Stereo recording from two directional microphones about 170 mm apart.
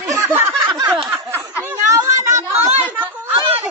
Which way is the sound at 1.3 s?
10° right (ahead or behind).